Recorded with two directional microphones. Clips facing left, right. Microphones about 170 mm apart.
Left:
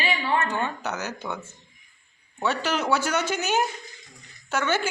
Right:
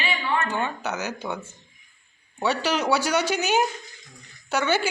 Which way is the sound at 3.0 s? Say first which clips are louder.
Right 2 dB; 35° right (ahead or behind).